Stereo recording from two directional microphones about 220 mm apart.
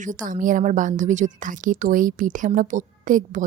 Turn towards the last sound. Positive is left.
turn(degrees=-35)  # may be behind; listen again after turning